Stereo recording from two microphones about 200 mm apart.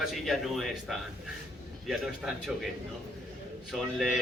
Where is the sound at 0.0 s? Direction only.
Centre (ahead or behind).